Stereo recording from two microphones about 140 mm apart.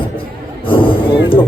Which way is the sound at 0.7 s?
40° left (ahead or behind).